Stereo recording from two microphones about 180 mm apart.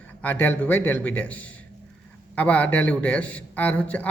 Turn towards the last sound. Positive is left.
turn(degrees=5)  # may be behind; listen again after turning